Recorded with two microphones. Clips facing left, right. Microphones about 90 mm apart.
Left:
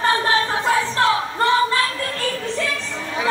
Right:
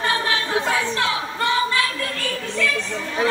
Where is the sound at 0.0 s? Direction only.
35° left (ahead or behind).